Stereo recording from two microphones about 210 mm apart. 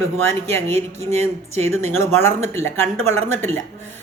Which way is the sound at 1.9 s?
10° left (ahead or behind).